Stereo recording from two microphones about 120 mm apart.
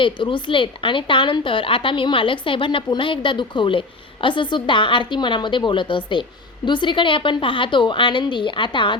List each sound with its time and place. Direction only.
0.0 s a woman's voice: 45° left (ahead or behind)